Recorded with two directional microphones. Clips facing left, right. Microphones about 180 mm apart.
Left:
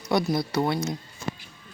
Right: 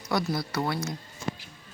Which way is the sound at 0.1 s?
20° left (ahead or behind).